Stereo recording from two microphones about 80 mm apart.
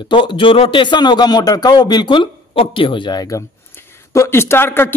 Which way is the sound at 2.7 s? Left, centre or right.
Left.